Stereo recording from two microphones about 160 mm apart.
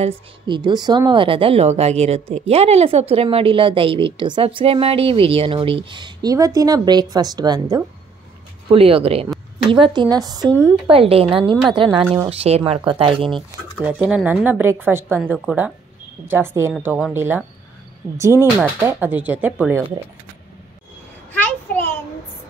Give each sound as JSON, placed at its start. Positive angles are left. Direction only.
{"t": 0.5, "sound": "a woman's voice", "side_deg": -30}
{"t": 8.6, "sound": "a woman's voice", "side_deg": -35}
{"t": 10.9, "sound": "a woman's voice", "side_deg": -35}
{"t": 13.8, "sound": "speech", "side_deg": -10}
{"t": 21.3, "sound": "a sound", "side_deg": 10}